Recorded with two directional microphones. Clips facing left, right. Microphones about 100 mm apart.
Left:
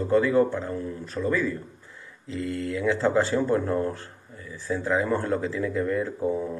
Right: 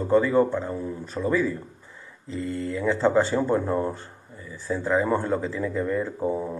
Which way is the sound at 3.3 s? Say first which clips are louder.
Even; 10° right (ahead or behind).